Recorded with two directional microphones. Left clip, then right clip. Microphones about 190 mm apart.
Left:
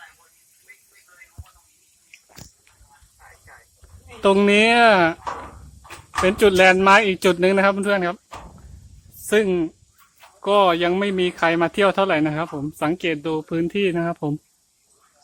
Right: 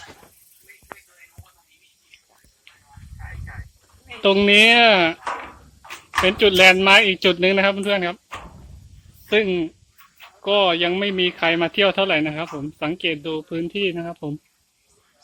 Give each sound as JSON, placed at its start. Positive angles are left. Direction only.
{"t": 4.2, "sound": "speech", "side_deg": 5}